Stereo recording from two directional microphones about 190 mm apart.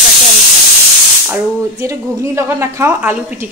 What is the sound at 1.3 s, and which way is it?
A woman's voice, 15° right (ahead or behind).